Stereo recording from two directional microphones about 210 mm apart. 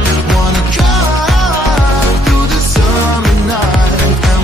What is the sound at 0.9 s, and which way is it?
Music, centre (ahead or behind).